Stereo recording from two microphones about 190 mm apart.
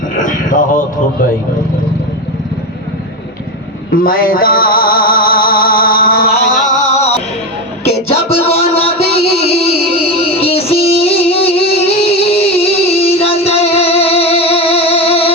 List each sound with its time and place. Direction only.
0.2 s a sound: 45° left (ahead or behind)
3.9 s music: 50° left (ahead or behind)
6.9 s music: 35° left (ahead or behind)